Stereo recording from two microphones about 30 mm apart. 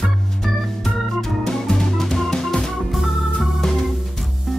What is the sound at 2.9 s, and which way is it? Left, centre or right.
Organ, centre.